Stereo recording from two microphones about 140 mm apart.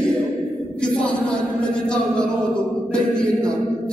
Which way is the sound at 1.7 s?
5° left (ahead or behind).